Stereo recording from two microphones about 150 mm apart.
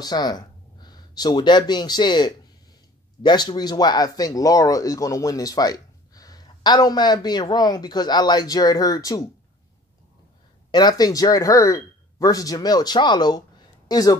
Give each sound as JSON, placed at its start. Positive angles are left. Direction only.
{"t": 0.0, "sound": "speech", "side_deg": 25}
{"t": 10.7, "sound": "speech", "side_deg": 25}